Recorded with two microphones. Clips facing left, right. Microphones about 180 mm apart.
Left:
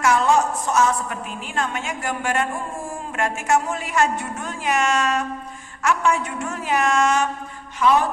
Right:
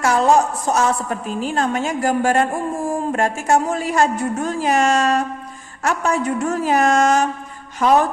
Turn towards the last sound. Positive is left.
turn(degrees=-40)  # may be behind; listen again after turning